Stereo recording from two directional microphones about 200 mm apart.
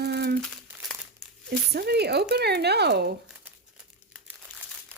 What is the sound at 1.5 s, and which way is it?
Speech, 55° right (ahead or behind).